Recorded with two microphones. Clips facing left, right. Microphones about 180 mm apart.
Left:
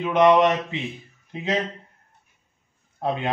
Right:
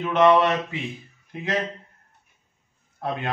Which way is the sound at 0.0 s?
15° left (ahead or behind).